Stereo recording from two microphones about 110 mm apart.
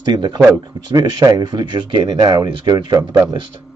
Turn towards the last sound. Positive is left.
turn(degrees=-40)  # may be behind; listen again after turning